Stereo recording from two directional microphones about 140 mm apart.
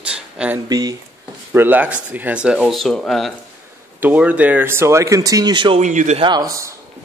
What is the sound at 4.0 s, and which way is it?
Speech, 10° right (ahead or behind).